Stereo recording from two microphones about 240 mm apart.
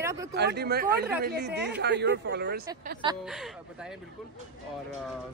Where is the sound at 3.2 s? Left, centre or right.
Centre.